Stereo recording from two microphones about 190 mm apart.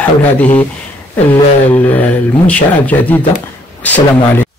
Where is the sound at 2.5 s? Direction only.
10° left (ahead or behind).